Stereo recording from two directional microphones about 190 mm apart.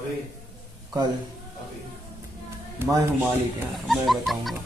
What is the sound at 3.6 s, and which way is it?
Speech, centre (ahead or behind).